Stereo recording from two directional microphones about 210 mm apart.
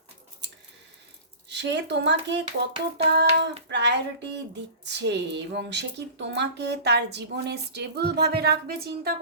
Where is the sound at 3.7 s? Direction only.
55° right (ahead or behind).